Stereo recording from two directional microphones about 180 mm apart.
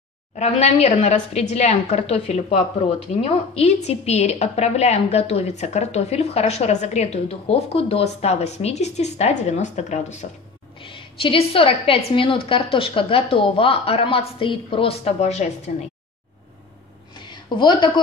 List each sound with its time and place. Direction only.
0.4 s a woman's voice: 35° left (ahead or behind)
10.8 s a woman's voice: 30° left (ahead or behind)
17.2 s a woman's voice: 25° left (ahead or behind)